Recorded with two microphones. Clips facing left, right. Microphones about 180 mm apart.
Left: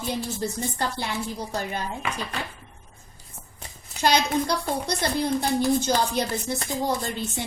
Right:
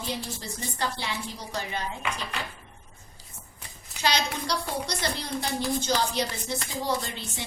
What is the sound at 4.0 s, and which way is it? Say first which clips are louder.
A woman's voice: left 6 dB; 55° left (ahead or behind).